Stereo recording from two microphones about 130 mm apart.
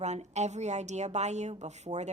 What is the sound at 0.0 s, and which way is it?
A woman's voice, 60° right (ahead or behind).